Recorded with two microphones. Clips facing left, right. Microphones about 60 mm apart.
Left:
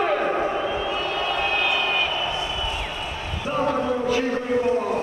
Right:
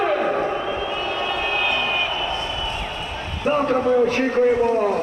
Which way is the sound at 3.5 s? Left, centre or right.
Right.